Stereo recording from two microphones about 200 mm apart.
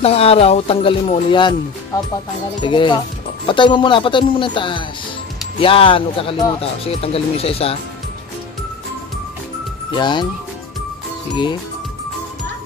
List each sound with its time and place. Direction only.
0.0 s speech: 30° left (ahead or behind)
2.6 s speech: 25° left (ahead or behind)
9.8 s speech: 20° left (ahead or behind)